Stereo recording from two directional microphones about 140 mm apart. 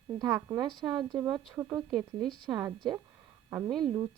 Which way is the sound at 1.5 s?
15° right (ahead or behind).